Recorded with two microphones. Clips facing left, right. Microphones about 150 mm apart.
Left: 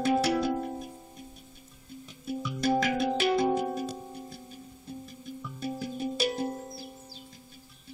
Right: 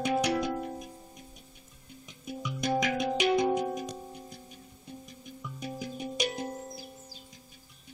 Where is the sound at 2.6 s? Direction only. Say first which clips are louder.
Left 2 dB; 5° left (ahead or behind).